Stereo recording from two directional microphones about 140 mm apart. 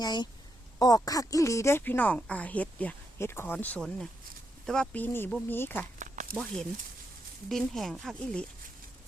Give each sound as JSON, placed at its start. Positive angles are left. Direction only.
{"t": 0.0, "sound": "a woman's voice", "side_deg": 30}
{"t": 6.0, "sound": "a sound", "side_deg": -65}
{"t": 6.3, "sound": "speech", "side_deg": 5}